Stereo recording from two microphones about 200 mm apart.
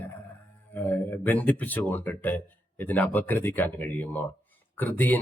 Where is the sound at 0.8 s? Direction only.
10° left (ahead or behind).